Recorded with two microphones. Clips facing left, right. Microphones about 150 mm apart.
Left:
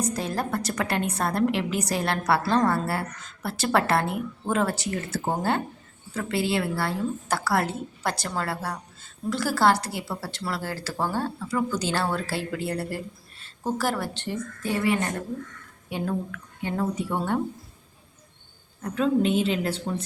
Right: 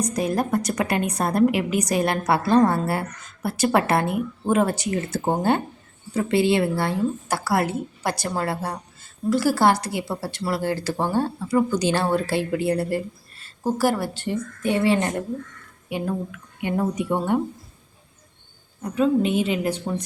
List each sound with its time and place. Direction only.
0.1 s a woman's voice: 15° right (ahead or behind)
14.7 s speech: 25° right (ahead or behind)
15.9 s a woman's voice: 10° right (ahead or behind)
18.8 s a woman's voice: 10° right (ahead or behind)